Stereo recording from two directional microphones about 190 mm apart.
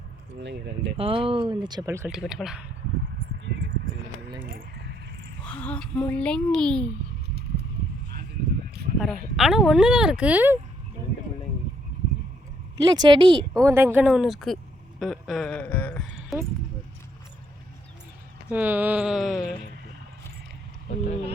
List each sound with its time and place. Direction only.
0.4 s speech: 70° right (ahead or behind)
0.9 s speech: 30° right (ahead or behind)
2.0 s speech: centre (ahead or behind)
3.4 s a sound: 65° right (ahead or behind)
5.4 s speech: 5° left (ahead or behind)
9.0 s speech: centre (ahead or behind)
12.7 s speech: 20° right (ahead or behind)
13.7 s speech: 10° right (ahead or behind)
18.5 s speech: 10° right (ahead or behind)